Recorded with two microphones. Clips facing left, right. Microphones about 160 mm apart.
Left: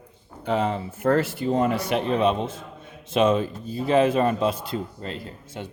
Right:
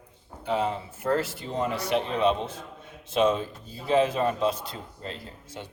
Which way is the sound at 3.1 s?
85° left.